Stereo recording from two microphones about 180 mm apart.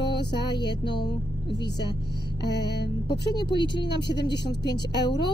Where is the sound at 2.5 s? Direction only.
70° left (ahead or behind).